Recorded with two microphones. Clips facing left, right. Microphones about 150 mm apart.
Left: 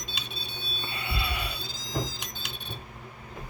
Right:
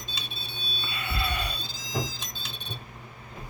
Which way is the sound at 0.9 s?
25° left (ahead or behind).